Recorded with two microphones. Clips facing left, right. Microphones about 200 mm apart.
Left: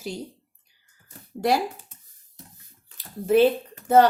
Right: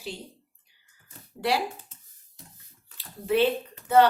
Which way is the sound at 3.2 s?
45° left (ahead or behind).